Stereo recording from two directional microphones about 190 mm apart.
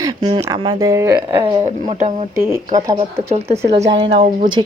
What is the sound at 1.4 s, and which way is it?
Speech, 35° right (ahead or behind).